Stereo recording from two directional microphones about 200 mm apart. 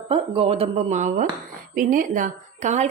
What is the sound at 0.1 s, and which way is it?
A woman's voice, 30° right (ahead or behind).